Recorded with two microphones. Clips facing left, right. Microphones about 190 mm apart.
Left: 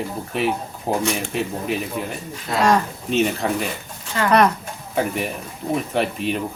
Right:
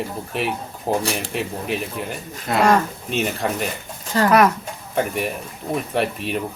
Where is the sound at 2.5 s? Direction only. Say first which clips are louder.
Right 2 dB; 60° right (ahead or behind).